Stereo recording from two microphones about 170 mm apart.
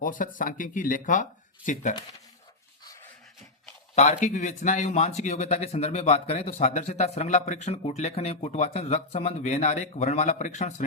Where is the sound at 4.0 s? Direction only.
45° left (ahead or behind).